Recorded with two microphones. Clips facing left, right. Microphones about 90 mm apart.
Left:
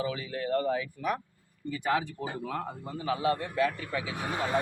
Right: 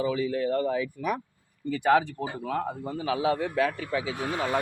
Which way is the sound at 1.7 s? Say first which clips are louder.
Right 7 dB; 75° right (ahead or behind).